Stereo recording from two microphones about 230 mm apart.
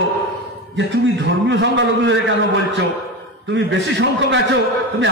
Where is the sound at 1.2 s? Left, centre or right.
Right.